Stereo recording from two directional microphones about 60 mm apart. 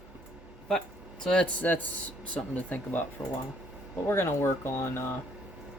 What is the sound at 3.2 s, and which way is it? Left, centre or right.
Speech, left.